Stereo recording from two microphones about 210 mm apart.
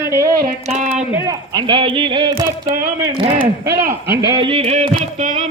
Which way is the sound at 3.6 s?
50° right (ahead or behind).